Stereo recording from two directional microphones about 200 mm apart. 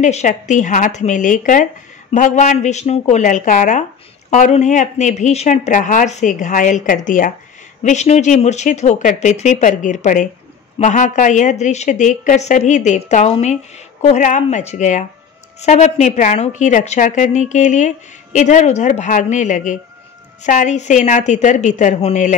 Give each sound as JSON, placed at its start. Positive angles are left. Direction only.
{"t": 0.0, "sound": "a woman's voice", "side_deg": 35}